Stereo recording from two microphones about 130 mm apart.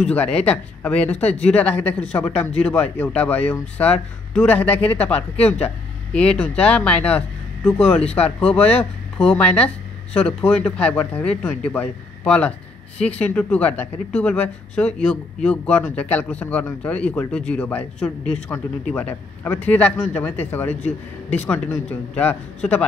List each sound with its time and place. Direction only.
0.0 s a woman's voice: 10° left (ahead or behind)
18.9 s speech: 10° left (ahead or behind)